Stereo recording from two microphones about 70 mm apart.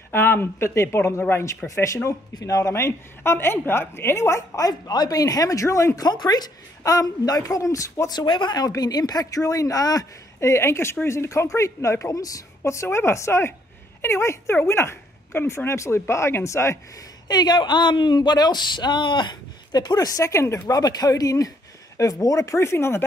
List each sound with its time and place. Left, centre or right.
0.1 s a woman's voice: left
2.3 s a woman's voice: left
6.0 s speech: left
6.8 s a woman's voice: left
8.1 s a woman's voice: left
12.6 s speech: left
17.3 s speech: left
20.2 s a woman's voice: left
20.7 s a woman's voice: left